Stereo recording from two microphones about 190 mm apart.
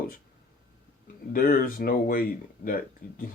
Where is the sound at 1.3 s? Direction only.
50° left (ahead or behind).